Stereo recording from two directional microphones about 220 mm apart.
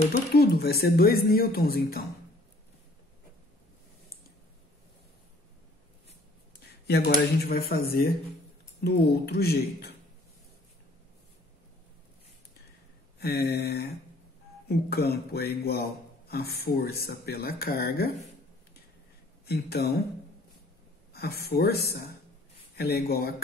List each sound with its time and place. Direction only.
0.3 s speech: 45° left (ahead or behind)
6.9 s speech: 45° left (ahead or behind)
13.2 s speech: 50° left (ahead or behind)
19.4 s speech: 45° left (ahead or behind)
21.1 s a woman's voice: 45° left (ahead or behind)